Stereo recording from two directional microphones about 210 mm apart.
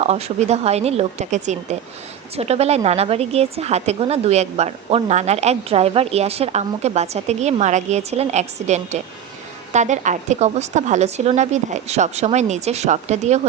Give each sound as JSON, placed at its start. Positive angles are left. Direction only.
{"t": 0.0, "sound": "a woman's voice", "side_deg": -30}